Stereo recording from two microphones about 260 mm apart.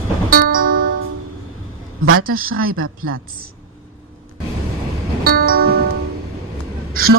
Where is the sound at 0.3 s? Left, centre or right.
Right.